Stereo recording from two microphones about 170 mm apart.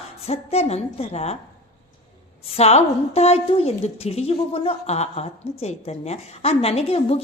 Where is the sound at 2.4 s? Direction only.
40° left (ahead or behind).